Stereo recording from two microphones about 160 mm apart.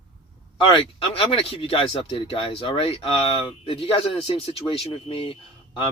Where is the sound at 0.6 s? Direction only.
30° left (ahead or behind).